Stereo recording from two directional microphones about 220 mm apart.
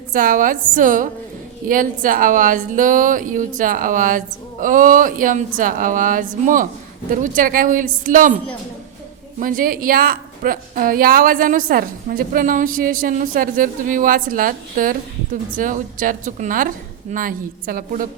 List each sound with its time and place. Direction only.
0.1 s a woman's voice: 40° right (ahead or behind)
9.4 s a woman's voice: 40° right (ahead or behind)